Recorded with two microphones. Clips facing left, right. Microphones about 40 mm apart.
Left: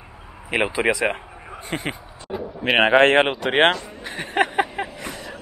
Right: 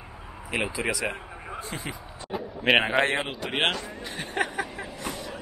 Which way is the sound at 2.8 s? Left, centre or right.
Left.